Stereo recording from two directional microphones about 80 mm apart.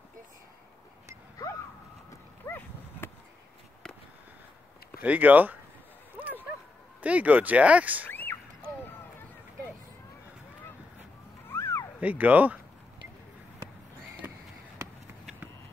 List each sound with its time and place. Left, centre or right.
2.4 s a sound: left
5.0 s speech: centre
7.0 s speech: centre
8.1 s a sound: left
11.5 s cat: left
12.0 s speech: centre